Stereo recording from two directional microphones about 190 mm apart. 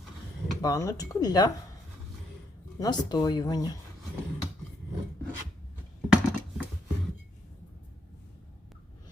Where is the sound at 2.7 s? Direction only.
20° left (ahead or behind).